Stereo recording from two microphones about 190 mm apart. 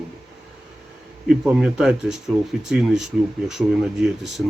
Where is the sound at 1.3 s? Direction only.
Centre (ahead or behind).